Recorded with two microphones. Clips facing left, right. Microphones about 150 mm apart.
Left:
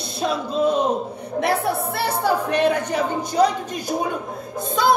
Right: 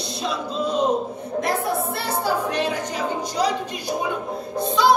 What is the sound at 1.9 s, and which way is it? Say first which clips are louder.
Music: left 2 dB; 60° left (ahead or behind).